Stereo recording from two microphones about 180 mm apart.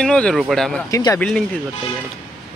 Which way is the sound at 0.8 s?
20° left (ahead or behind).